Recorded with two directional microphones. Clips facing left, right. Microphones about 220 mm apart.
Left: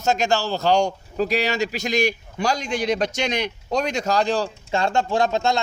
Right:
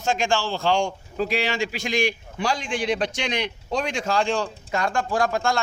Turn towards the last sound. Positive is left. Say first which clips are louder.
# left 2 dB
turn(degrees=20)  # may be behind; listen again after turning